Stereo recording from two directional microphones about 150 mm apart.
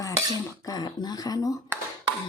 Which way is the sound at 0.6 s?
25° left (ahead or behind).